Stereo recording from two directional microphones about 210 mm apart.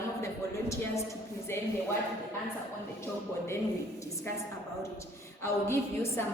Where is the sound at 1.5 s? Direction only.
10° left (ahead or behind).